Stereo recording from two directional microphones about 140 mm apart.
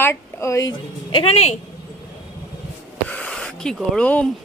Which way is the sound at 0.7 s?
40° left (ahead or behind).